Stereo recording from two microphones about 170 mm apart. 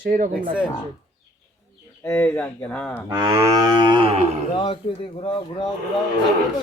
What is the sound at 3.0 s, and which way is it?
Cattle, 20° right (ahead or behind).